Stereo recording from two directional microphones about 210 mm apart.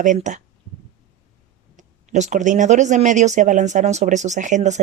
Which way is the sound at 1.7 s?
35° right (ahead or behind).